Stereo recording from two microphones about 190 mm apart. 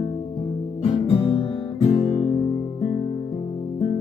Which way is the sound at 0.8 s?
30° left (ahead or behind).